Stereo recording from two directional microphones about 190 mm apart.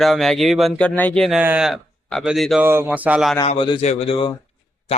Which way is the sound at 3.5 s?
30° left (ahead or behind).